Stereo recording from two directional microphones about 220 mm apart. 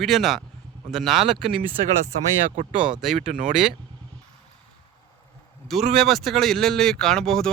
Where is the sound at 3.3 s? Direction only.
30° right (ahead or behind).